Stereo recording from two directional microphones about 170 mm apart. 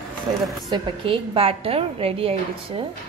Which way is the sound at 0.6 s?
30° right (ahead or behind).